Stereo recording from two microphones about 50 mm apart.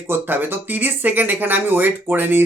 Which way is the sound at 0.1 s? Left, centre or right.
Right.